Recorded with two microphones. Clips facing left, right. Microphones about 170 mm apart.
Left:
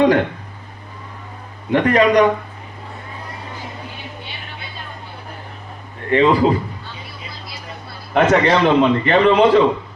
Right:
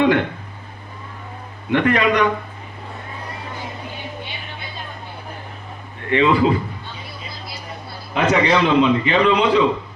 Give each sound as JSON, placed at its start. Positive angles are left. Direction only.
{"t": 0.0, "sound": "speech", "side_deg": 40}
{"t": 1.7, "sound": "speech", "side_deg": 35}
{"t": 6.1, "sound": "speech", "side_deg": 40}
{"t": 8.1, "sound": "a man's voice", "side_deg": 45}